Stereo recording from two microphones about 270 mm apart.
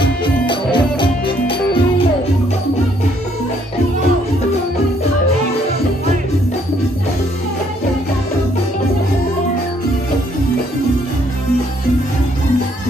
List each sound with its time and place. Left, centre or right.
0.0 s music: centre